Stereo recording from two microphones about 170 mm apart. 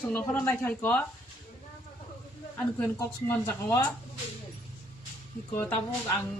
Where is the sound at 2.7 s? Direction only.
15° left (ahead or behind).